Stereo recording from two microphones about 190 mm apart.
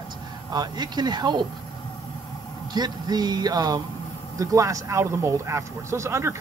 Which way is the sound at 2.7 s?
20° right (ahead or behind).